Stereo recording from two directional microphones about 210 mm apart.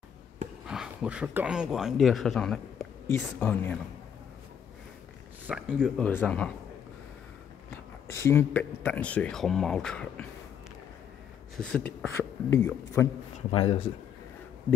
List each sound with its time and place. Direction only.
0.7 s speech: 5° right (ahead or behind)
5.5 s speech: centre (ahead or behind)
8.1 s speech: 15° left (ahead or behind)
11.5 s speech: 5° left (ahead or behind)
13.5 s speech: 25° left (ahead or behind)